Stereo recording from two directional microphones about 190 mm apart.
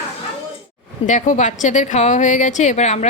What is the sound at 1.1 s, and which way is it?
A woman's voice, 40° left (ahead or behind).